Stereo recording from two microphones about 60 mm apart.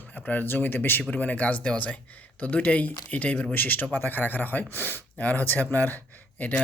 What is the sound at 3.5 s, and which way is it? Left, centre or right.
Speech, left.